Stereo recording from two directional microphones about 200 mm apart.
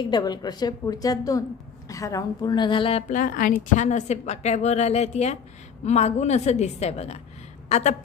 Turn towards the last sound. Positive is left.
turn(degrees=35)  # may be behind; listen again after turning